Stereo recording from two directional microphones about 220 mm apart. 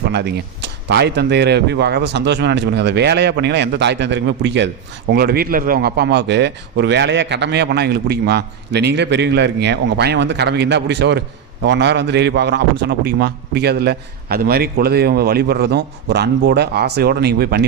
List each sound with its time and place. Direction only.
0.1 s speech: 50° right (ahead or behind)